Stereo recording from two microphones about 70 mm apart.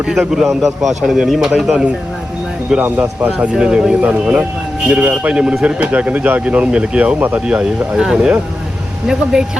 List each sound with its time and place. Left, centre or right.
0.1 s a man's voice: centre
2.8 s speech: right
3.4 s a man's voice: centre
7.2 s speech: right
7.4 s a man's voice: centre